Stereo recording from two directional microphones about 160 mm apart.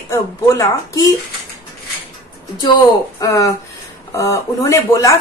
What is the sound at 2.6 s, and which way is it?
Speech, 25° left (ahead or behind).